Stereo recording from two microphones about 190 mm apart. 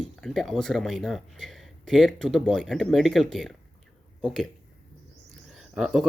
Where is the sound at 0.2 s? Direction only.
Centre (ahead or behind).